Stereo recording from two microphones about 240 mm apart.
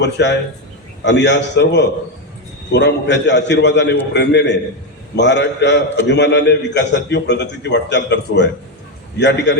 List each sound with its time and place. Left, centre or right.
0.0 s a man's voice: left